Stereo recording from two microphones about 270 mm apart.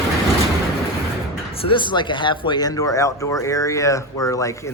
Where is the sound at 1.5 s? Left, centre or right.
Centre.